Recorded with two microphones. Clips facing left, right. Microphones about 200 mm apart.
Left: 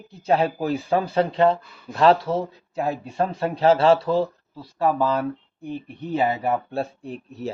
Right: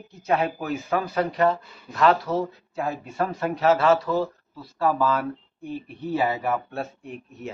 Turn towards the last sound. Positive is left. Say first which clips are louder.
# left 4 dB
turn(degrees=35)  # may be behind; listen again after turning